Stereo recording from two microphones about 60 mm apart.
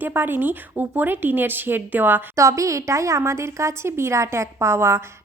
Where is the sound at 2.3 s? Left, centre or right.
Right.